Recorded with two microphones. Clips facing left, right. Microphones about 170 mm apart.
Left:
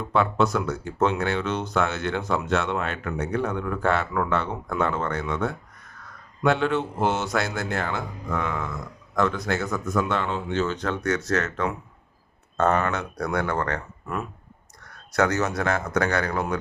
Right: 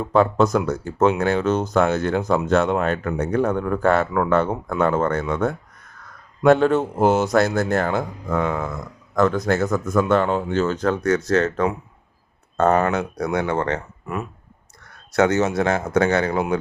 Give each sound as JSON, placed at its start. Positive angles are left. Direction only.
{"t": 0.0, "sound": "a man's voice", "side_deg": -40}
{"t": 13.3, "sound": "speech", "side_deg": -20}
{"t": 15.1, "sound": "speech", "side_deg": -25}